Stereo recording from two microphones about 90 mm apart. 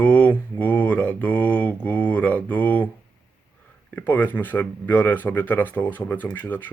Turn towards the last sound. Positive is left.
turn(degrees=20)  # may be behind; listen again after turning